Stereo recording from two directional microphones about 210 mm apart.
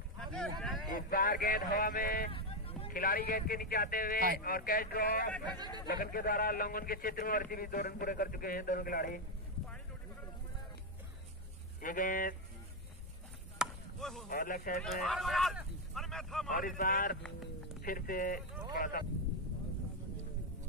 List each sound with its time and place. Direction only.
0.2 s speech: 5° left (ahead or behind)
0.9 s a man's voice: 40° left (ahead or behind)
2.3 s sheep: 25° left (ahead or behind)
2.9 s a man's voice: 45° left (ahead or behind)
11.8 s speech: 40° left (ahead or behind)
13.6 s chop: centre (ahead or behind)
14.3 s a man's voice: 45° left (ahead or behind)
14.8 s speech: centre (ahead or behind)
16.4 s speech: 40° left (ahead or behind)